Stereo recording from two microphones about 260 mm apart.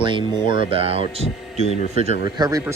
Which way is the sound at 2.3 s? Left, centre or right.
Centre.